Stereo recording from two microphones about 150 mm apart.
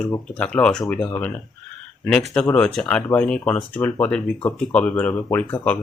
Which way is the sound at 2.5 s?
5° left (ahead or behind).